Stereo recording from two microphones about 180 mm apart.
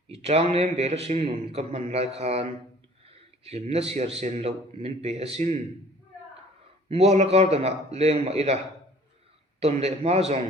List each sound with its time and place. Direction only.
0.1 s a sound: 35° right (ahead or behind)
0.5 s a man's voice: 35° right (ahead or behind)
6.8 s a man's voice: 35° right (ahead or behind)
9.6 s a man's voice: 35° right (ahead or behind)